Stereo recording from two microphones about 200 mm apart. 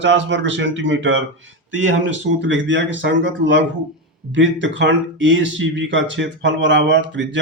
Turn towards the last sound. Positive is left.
turn(degrees=-60)  # may be behind; listen again after turning